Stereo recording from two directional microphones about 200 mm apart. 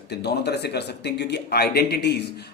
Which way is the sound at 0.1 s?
55° left (ahead or behind).